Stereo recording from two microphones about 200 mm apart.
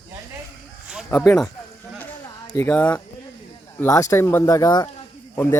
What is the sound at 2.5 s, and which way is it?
Speech, 10° left (ahead or behind).